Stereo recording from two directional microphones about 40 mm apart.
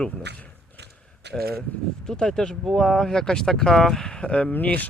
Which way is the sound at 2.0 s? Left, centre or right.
Centre.